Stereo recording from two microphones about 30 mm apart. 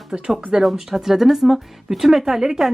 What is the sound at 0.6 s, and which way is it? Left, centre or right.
Speech, centre.